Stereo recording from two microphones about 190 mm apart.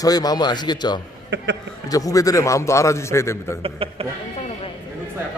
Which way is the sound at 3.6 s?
30° right (ahead or behind).